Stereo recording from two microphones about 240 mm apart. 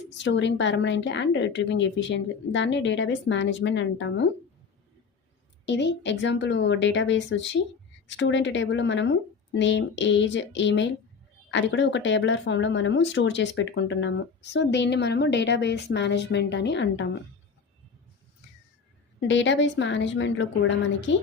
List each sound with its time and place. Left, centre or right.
0.2 s speech: left
5.6 s speech: left
19.3 s speech: left